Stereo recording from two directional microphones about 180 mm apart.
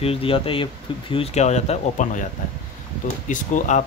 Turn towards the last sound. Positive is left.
turn(degrees=45)  # may be behind; listen again after turning